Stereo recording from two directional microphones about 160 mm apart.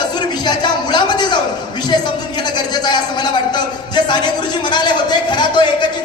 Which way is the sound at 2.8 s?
25° left (ahead or behind).